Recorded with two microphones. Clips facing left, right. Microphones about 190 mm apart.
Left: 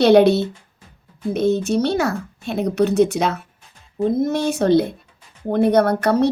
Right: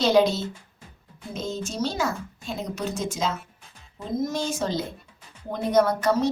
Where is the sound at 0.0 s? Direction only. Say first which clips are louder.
Left 8 dB; 65° left (ahead or behind).